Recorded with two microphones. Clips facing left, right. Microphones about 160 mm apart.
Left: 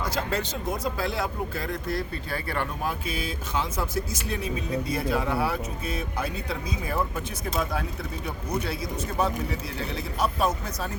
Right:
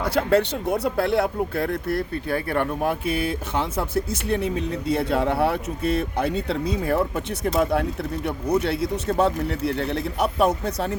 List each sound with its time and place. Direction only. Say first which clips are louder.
0.0 s speech: right 9 dB; 65° right (ahead or behind)